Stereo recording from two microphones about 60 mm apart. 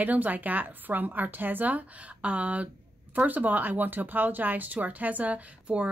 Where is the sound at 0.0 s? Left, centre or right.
Right.